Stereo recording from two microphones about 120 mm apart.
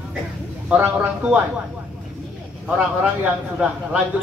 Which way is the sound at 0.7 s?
15° right (ahead or behind).